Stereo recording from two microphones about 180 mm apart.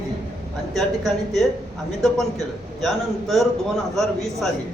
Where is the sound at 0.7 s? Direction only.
Centre (ahead or behind).